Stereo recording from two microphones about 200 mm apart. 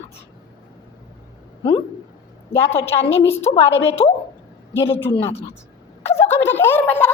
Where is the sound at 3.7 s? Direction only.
65° left (ahead or behind).